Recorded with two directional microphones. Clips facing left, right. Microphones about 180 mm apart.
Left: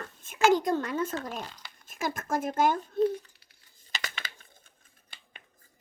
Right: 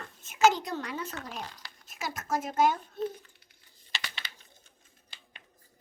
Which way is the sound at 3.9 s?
45° left (ahead or behind).